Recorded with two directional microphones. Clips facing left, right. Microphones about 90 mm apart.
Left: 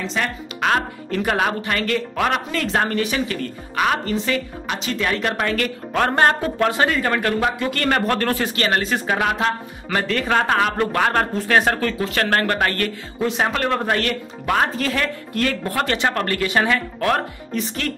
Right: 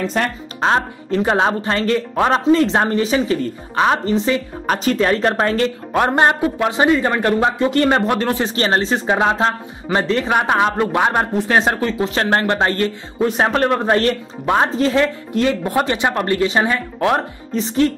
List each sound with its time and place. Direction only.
0.0 s speech: 50° right (ahead or behind)
0.6 s a man's voice: 25° right (ahead or behind)
4.6 s speech: 40° right (ahead or behind)
5.9 s a man's voice: 20° right (ahead or behind)